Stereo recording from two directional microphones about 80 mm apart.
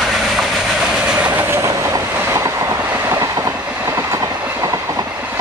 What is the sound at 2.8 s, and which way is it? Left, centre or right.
Train, right.